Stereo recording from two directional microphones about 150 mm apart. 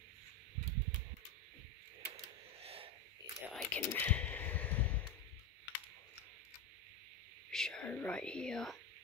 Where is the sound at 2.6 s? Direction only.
40° right (ahead or behind).